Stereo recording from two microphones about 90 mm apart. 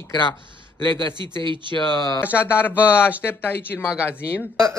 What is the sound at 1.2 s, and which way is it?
Speech, 60° right (ahead or behind).